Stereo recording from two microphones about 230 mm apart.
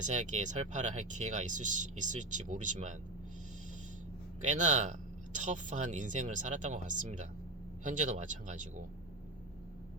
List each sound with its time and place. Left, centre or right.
0.0 s speech: right
4.4 s speech: right